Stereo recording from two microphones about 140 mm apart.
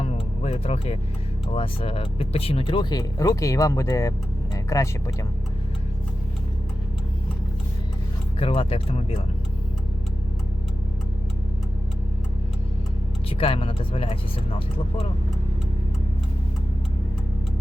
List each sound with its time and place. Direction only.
0.0 s music: 45° left (ahead or behind)
1.5 s speech: 40° left (ahead or behind)
3.0 s speech: 25° left (ahead or behind)
8.4 s speech: 40° left (ahead or behind)
13.3 s speech: 40° left (ahead or behind)